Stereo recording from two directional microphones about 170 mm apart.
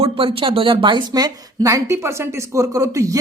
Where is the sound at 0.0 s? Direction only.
35° right (ahead or behind).